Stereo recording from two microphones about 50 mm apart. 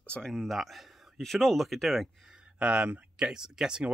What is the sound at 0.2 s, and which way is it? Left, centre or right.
Speech, centre.